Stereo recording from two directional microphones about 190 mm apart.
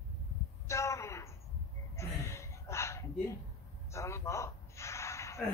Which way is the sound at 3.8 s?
15° left (ahead or behind).